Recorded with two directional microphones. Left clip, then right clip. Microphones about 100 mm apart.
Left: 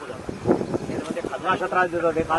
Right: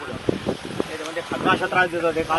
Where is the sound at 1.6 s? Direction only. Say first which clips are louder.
Right 1 dB; 20° right (ahead or behind).